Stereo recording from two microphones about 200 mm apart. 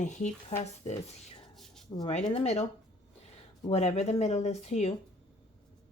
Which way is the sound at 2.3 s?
30° left (ahead or behind).